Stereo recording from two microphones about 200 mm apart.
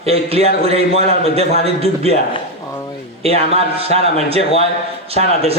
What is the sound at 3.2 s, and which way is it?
A man's voice, 30° right (ahead or behind).